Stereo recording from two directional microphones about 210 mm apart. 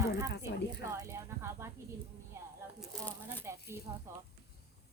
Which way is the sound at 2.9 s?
5° left (ahead or behind).